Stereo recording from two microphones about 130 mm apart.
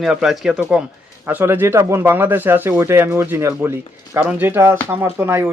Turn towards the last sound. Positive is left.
turn(degrees=-15)  # may be behind; listen again after turning